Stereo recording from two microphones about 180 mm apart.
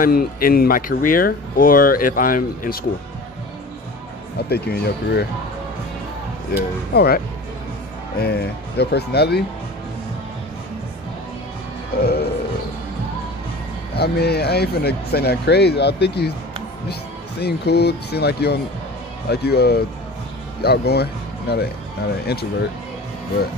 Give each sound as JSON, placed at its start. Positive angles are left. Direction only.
{"t": 0.0, "sound": "speech", "side_deg": 55}
{"t": 4.5, "sound": "speech", "side_deg": 60}
{"t": 6.5, "sound": "speech", "side_deg": 60}
{"t": 8.2, "sound": "speech", "side_deg": 65}
{"t": 12.0, "sound": "music", "side_deg": 60}
{"t": 13.9, "sound": "speech", "side_deg": 65}
{"t": 17.4, "sound": "speech", "side_deg": 65}